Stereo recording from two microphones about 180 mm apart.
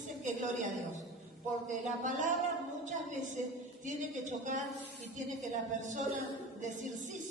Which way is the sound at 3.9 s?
45° right (ahead or behind).